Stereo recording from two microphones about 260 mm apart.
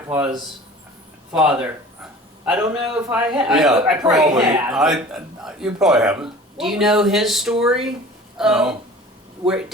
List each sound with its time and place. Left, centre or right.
0.1 s speech: centre
4.2 s speech: centre
4.7 s speech: centre